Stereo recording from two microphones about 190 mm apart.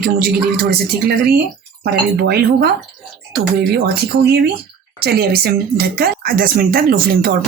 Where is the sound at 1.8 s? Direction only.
60° right (ahead or behind).